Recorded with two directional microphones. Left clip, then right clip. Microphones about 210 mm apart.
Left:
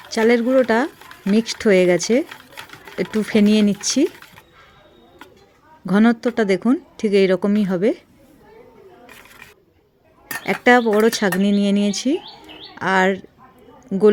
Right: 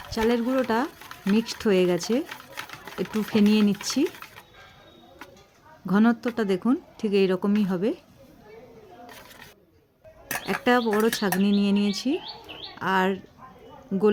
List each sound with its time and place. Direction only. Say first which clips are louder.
0.1 s speech: left 9 dB; 15° left (ahead or behind)
5.8 s speech: left 6 dB; 15° left (ahead or behind)
10.4 s speech: left 8 dB; 20° left (ahead or behind)